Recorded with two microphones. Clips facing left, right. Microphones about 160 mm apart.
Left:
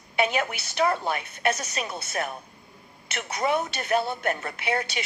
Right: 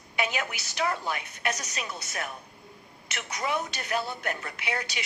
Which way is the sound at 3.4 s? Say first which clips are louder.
Left 5 dB; 55° left (ahead or behind).